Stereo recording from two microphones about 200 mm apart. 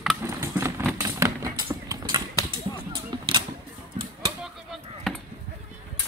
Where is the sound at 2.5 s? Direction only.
25° right (ahead or behind).